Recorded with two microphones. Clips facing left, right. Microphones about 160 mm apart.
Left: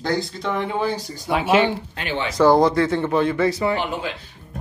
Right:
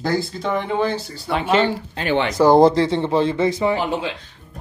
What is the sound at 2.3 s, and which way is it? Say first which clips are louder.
Speech: right 2 dB; 25° right (ahead or behind).